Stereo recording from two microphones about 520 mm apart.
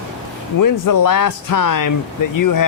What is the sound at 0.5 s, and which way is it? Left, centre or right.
A man's voice, left.